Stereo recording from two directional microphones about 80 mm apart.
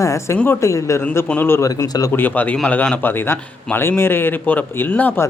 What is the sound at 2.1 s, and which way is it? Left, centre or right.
Speech, left.